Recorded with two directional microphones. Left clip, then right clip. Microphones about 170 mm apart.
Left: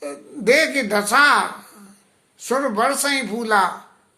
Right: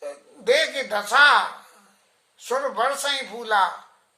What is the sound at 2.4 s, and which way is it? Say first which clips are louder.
Speech: left 4 dB; 15° left (ahead or behind).